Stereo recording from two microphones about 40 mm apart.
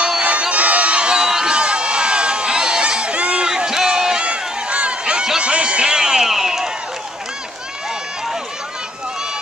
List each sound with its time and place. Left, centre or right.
0.2 s crowd: right
5.4 s a sound: right
6.2 s run: centre